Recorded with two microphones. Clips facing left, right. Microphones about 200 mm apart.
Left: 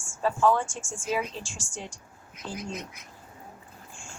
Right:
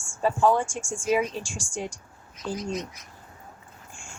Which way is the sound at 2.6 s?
55° left (ahead or behind).